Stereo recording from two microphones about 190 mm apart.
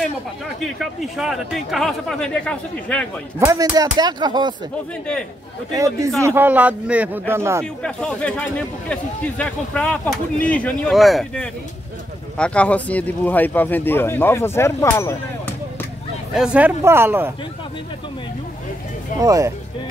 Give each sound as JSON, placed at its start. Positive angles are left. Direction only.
{"t": 0.6, "sound": "speech", "side_deg": 0}
{"t": 3.3, "sound": "speech", "side_deg": -15}
{"t": 5.7, "sound": "speech", "side_deg": -15}
{"t": 7.6, "sound": "speech", "side_deg": 5}
{"t": 16.3, "sound": "speech", "side_deg": -10}
{"t": 19.1, "sound": "speech", "side_deg": -15}